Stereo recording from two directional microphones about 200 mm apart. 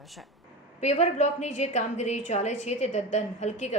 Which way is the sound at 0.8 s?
35° left (ahead or behind).